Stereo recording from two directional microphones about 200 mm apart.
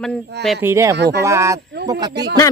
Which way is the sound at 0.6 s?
15° right (ahead or behind).